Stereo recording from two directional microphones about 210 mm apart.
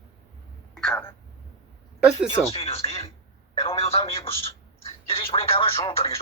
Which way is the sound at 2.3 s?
30° left (ahead or behind).